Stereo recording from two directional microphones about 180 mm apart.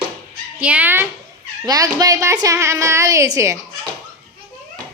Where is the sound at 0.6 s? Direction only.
10° right (ahead or behind).